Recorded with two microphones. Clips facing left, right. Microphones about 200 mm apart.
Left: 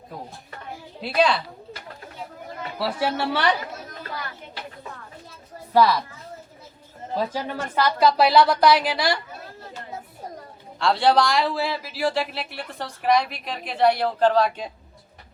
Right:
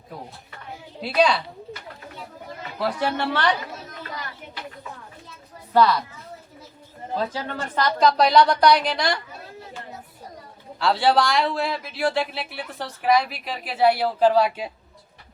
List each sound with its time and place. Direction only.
1.0 s speech: centre (ahead or behind)
2.7 s speech: 5° left (ahead or behind)
5.7 s speech: 10° left (ahead or behind)
7.2 s speech: 10° left (ahead or behind)
10.8 s speech: centre (ahead or behind)